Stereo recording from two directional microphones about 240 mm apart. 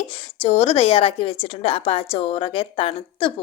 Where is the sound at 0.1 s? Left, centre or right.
Left.